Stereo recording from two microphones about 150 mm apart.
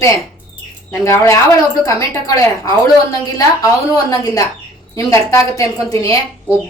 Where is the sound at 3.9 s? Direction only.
25° left (ahead or behind).